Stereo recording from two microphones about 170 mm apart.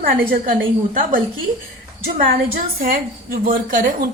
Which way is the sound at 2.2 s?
55° right (ahead or behind).